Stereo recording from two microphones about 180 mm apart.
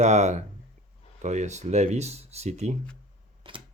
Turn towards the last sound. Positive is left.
turn(degrees=-30)  # may be behind; listen again after turning